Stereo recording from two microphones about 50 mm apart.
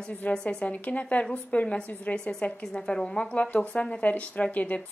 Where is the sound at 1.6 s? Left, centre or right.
Centre.